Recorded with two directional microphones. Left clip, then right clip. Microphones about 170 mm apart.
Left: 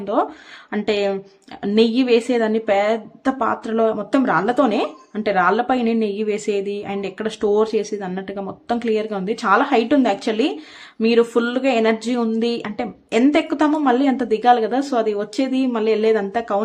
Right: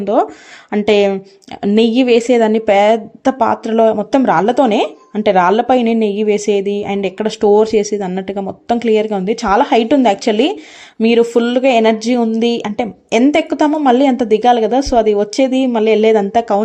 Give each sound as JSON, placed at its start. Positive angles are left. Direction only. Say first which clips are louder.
{"t": 0.0, "sound": "a woman's voice", "louder": "right 6 dB", "side_deg": -30}